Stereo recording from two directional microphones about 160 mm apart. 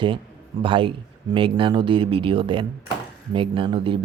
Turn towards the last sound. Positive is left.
turn(degrees=-35)  # may be behind; listen again after turning